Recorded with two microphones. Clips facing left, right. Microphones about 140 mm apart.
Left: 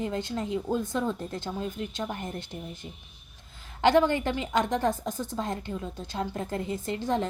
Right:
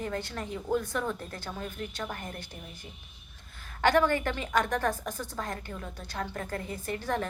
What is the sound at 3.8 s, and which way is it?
A woman's voice, 20° left (ahead or behind).